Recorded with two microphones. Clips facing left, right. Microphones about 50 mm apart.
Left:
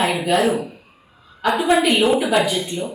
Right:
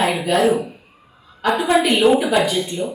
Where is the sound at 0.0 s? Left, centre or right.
Centre.